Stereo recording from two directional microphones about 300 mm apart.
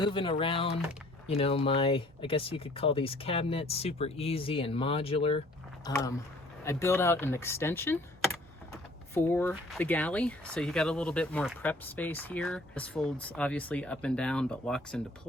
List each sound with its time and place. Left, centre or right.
0.0 s speech: centre
9.1 s speech: centre